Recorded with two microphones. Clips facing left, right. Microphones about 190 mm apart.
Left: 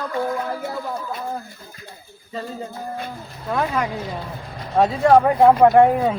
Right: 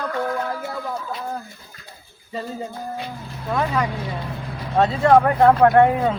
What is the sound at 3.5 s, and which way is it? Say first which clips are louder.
Speech: even; 5° left (ahead or behind).